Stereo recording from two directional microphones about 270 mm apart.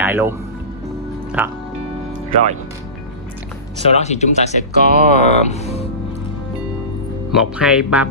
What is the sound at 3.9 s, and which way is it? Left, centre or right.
Speech, left.